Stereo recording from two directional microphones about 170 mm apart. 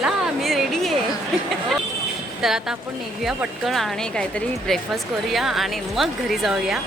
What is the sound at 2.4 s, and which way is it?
Speech, 5° right (ahead or behind).